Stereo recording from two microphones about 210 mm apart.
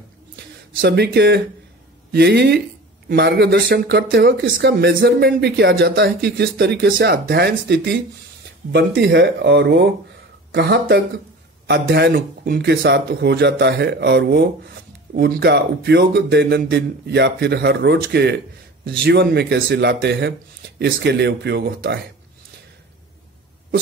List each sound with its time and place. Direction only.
0.7 s speech: 50° right (ahead or behind)